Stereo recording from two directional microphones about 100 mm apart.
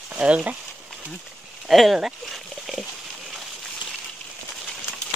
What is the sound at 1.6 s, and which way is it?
Speech, centre (ahead or behind).